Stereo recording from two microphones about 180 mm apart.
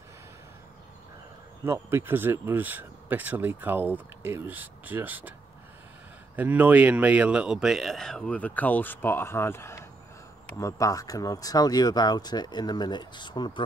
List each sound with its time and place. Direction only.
1.7 s speech: 15° right (ahead or behind)
6.3 s a man's voice: 10° right (ahead or behind); by 13.7 s 25° left (ahead or behind)